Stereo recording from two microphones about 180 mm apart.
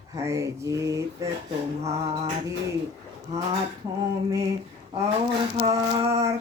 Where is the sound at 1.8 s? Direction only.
35° right (ahead or behind).